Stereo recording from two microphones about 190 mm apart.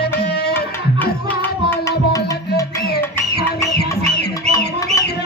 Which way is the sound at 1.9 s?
15° left (ahead or behind).